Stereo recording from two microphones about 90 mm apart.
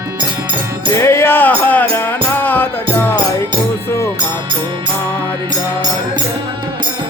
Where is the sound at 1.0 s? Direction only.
30° left (ahead or behind).